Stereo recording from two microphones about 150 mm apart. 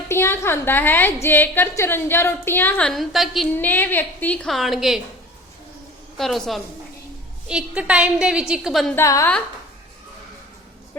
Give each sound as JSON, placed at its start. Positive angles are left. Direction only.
{"t": 0.1, "sound": "a woman's voice", "side_deg": 15}
{"t": 3.6, "sound": "a woman's voice", "side_deg": 10}
{"t": 6.1, "sound": "a woman's voice", "side_deg": 0}
{"t": 9.0, "sound": "a woman's voice", "side_deg": 20}